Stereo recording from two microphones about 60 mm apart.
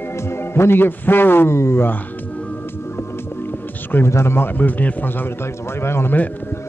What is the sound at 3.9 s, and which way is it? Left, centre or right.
Speech, left.